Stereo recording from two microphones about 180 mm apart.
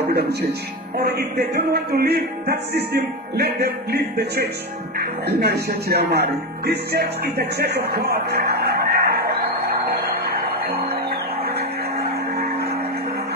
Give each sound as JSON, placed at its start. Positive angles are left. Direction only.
{"t": 0.1, "sound": "a man's voice", "side_deg": -65}